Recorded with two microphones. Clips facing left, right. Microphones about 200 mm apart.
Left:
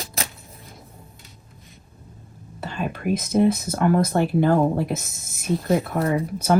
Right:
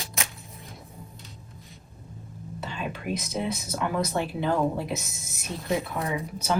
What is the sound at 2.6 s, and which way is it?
Speech, 50° left (ahead or behind).